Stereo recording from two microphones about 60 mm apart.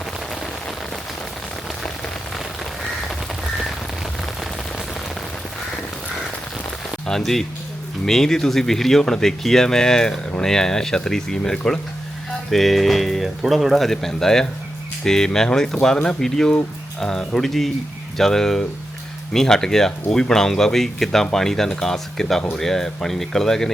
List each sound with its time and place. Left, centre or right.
7.1 s speech: centre